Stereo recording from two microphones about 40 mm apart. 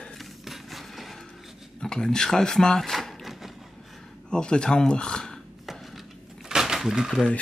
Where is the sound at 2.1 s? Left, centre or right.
Centre.